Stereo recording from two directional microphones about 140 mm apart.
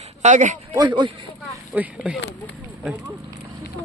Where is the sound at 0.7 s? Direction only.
35° right (ahead or behind).